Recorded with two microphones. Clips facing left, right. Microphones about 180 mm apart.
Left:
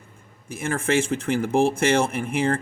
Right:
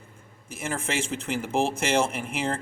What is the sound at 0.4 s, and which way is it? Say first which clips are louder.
Speech: left 6 dB; 55° left (ahead or behind).